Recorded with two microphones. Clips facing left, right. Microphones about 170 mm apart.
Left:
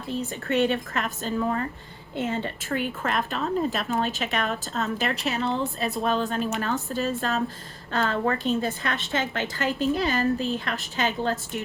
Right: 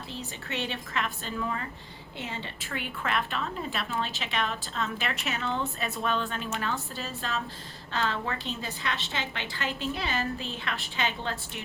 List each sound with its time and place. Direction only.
0.1 s a woman's voice: 50° left (ahead or behind)